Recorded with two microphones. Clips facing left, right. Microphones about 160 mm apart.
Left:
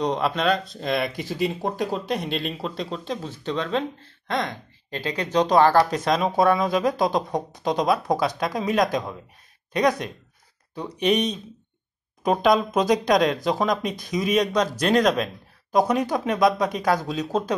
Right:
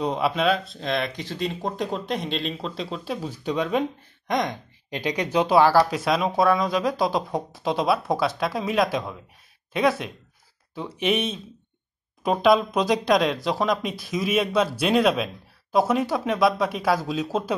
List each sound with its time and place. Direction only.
0.0 s speech: 5° right (ahead or behind)